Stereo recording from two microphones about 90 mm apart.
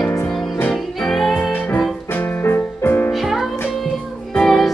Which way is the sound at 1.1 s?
5° left (ahead or behind).